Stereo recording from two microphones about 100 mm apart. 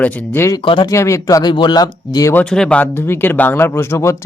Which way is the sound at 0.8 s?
30° left (ahead or behind).